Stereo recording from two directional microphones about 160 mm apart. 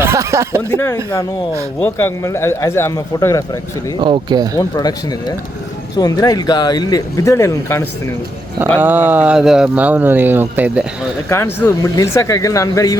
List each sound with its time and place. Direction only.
0.0 s chuckle: 20° right (ahead or behind)
0.7 s speech: 15° left (ahead or behind)
4.0 s speech: 30° right (ahead or behind)
4.5 s speech: 25° left (ahead or behind)
6.0 s speech: 25° left (ahead or behind)
8.8 s speech: 10° right (ahead or behind)
11.3 s speech: 15° left (ahead or behind)